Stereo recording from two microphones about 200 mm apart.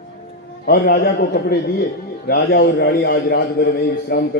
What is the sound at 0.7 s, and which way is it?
A man's voice, 50° left (ahead or behind).